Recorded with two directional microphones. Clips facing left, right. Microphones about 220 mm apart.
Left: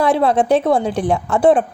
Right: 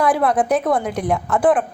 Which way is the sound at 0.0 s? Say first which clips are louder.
Left 2 dB; 25° left (ahead or behind).